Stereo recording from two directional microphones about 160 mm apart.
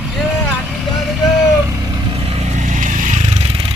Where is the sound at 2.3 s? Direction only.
45° right (ahead or behind).